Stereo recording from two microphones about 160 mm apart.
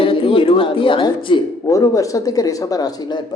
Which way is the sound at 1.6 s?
20° left (ahead or behind).